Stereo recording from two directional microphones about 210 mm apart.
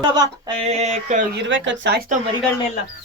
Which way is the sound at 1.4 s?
60° right (ahead or behind).